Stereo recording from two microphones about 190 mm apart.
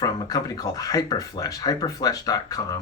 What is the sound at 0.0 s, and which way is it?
Speech, 20° left (ahead or behind).